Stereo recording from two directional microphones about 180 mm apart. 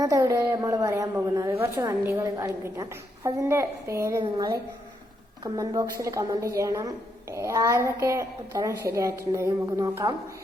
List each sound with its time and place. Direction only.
0.0 s a woman's voice: 20° right (ahead or behind)